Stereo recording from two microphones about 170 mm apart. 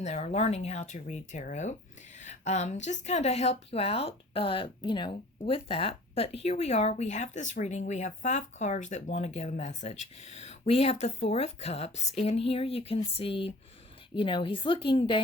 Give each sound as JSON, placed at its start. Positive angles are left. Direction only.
{"t": 0.0, "sound": "a woman's voice", "side_deg": 40}